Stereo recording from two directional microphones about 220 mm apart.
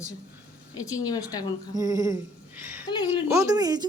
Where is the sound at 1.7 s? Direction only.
15° right (ahead or behind).